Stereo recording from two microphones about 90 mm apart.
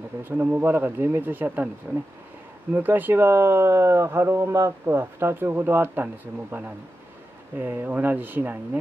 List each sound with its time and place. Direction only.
0.2 s speech: 20° right (ahead or behind)
2.7 s speech: 20° right (ahead or behind)